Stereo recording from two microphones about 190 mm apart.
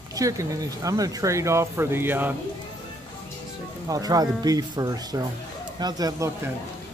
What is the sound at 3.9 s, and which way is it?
Speech, 20° right (ahead or behind).